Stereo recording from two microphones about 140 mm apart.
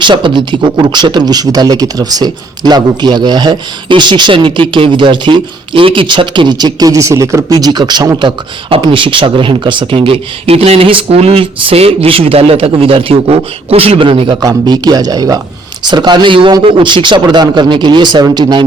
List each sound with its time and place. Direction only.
0.0 s speech: 35° right (ahead or behind)
14.4 s a man's voice: 30° right (ahead or behind)